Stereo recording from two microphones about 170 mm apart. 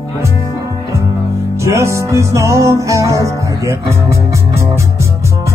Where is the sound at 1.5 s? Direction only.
15° right (ahead or behind).